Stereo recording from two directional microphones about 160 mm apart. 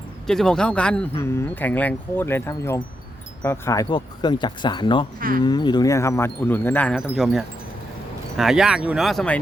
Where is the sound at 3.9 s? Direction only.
30° left (ahead or behind).